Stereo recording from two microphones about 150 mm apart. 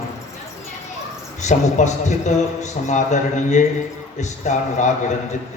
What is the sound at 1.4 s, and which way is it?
A man's voice, 55° left (ahead or behind).